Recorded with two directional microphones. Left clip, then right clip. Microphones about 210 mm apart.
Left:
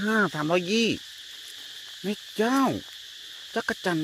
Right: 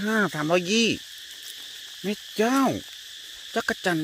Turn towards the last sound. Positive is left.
turn(degrees=-5)  # may be behind; listen again after turning